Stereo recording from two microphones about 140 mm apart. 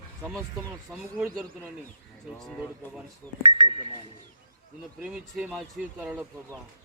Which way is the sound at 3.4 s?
40° right (ahead or behind).